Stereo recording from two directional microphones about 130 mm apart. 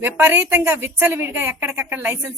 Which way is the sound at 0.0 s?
15° right (ahead or behind).